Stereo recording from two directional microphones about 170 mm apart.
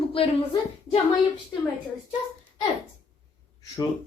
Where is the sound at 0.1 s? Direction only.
35° left (ahead or behind).